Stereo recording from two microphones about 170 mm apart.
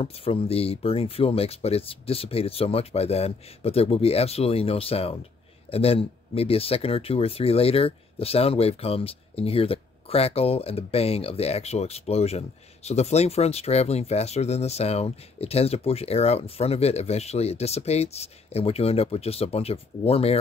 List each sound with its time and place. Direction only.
0.0 s speech: 35° left (ahead or behind)